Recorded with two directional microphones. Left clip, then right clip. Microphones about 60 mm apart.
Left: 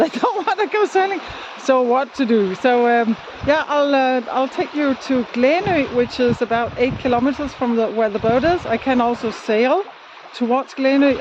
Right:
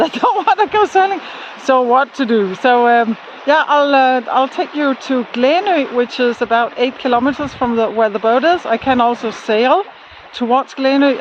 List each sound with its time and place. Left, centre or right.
0.0 s a sound: left
2.0 s speech: centre
2.3 s speech: left
5.0 s speech: centre